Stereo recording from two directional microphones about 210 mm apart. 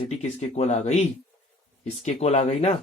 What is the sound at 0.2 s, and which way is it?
Speech, 30° left (ahead or behind).